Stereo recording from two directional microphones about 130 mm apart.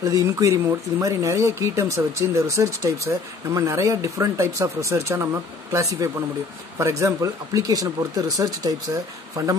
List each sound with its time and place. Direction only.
0.0 s speech: 25° right (ahead or behind)